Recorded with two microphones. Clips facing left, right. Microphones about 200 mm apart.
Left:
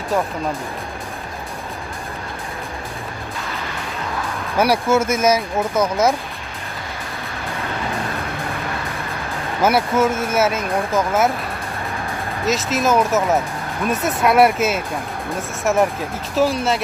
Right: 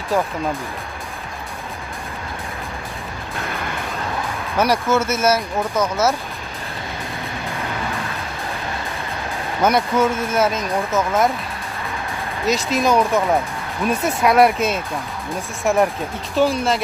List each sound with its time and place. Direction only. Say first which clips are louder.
4.6 s speech: left 2 dB; 10° left (ahead or behind)
9.6 s speech: even; 5° left (ahead or behind)
12.4 s speech: right 1 dB; centre (ahead or behind)